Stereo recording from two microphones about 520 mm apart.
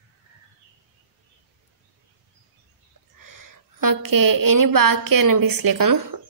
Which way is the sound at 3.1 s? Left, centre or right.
Right.